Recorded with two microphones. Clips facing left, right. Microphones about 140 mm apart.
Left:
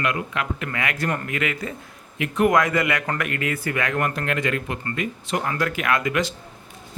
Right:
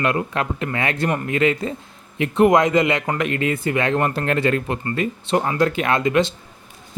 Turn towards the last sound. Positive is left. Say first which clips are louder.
# right 4 dB
turn(degrees=-25)  # may be behind; listen again after turning